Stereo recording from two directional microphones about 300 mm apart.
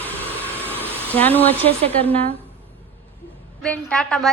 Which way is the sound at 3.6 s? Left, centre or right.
Centre.